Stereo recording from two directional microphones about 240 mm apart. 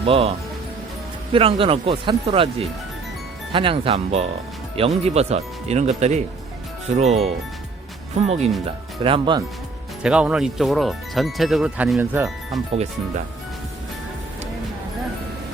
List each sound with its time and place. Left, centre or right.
0.0 s speech: right
10.0 s speech: centre
12.7 s speech: right